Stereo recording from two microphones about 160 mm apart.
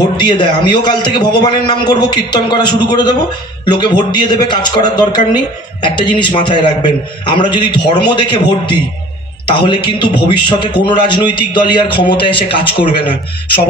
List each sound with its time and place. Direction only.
0.2 s speech: 30° left (ahead or behind)